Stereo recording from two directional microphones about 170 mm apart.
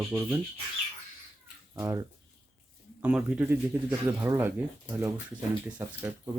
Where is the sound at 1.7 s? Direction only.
20° right (ahead or behind).